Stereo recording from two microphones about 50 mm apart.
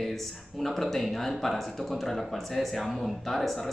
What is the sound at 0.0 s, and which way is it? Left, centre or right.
Speech, centre.